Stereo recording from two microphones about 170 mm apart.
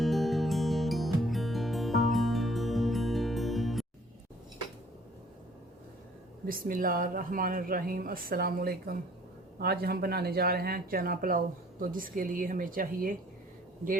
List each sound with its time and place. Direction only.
0.0 s music: centre (ahead or behind)
6.5 s speech: 55° right (ahead or behind)